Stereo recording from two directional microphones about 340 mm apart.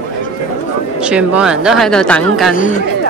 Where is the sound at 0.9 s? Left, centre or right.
Centre.